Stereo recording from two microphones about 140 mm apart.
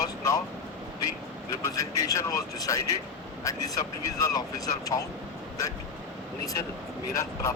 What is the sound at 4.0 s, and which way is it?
Speech, 25° left (ahead or behind).